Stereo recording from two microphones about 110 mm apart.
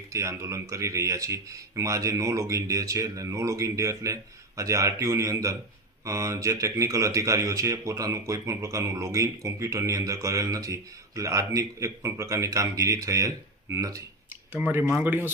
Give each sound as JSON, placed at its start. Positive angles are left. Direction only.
{"t": 0.1, "sound": "speech", "side_deg": -30}
{"t": 14.5, "sound": "speech", "side_deg": -20}